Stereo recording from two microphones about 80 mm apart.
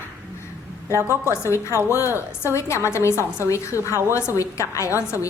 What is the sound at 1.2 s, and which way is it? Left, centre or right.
A woman's voice, left.